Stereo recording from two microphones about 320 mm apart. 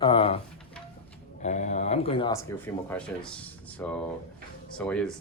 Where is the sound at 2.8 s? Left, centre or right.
Centre.